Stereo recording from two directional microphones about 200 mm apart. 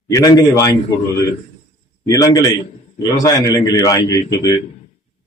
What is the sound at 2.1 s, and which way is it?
A man's voice, 20° left (ahead or behind).